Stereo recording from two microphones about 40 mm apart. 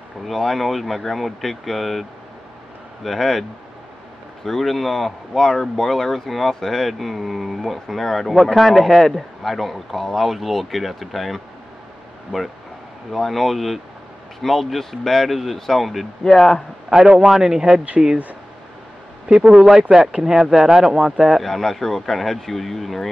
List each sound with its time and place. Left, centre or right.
0.3 s speech: centre
4.5 s speech: centre
16.3 s speech: centre
16.9 s speech: centre
19.5 s speech: centre
21.4 s speech: centre